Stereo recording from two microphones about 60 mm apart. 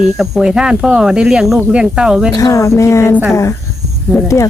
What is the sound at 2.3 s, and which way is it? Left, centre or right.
Speech, left.